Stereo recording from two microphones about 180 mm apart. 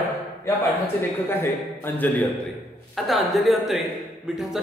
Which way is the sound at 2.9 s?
Centre (ahead or behind).